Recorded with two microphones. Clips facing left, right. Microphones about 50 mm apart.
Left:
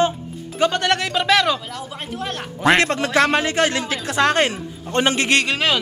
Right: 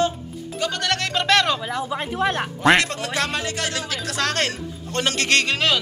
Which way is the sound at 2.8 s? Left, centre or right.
Left.